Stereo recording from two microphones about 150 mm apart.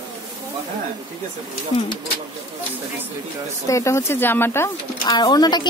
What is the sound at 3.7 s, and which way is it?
Speech, 20° left (ahead or behind).